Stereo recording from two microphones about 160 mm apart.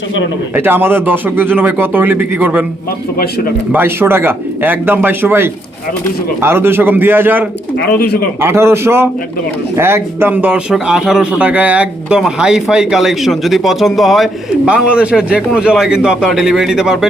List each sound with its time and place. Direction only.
0.5 s speech: 15° right (ahead or behind)
3.7 s speech: 15° right (ahead or behind)
7.8 s speech: 80° left
8.4 s speech: 15° right (ahead or behind)